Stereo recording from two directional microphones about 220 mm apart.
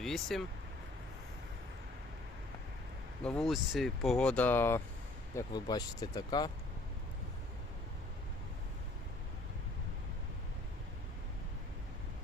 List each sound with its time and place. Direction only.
0.0 s speech: centre (ahead or behind)
3.2 s speech: centre (ahead or behind); by 6.5 s 20° left (ahead or behind)